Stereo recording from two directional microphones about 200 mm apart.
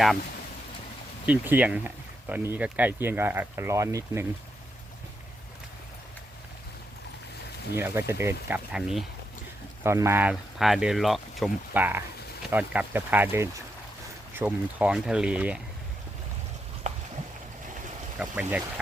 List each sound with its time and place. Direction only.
1.3 s speech: 5° right (ahead or behind)
7.8 s speech: 10° right (ahead or behind)
9.8 s speech: 15° right (ahead or behind)
16.9 s a sound: 35° right (ahead or behind)
18.2 s speech: 5° right (ahead or behind)